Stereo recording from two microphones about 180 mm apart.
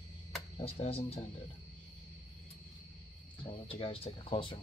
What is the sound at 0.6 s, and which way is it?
Speech, 30° left (ahead or behind).